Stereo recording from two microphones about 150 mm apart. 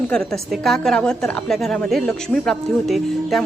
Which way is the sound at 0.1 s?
5° left (ahead or behind).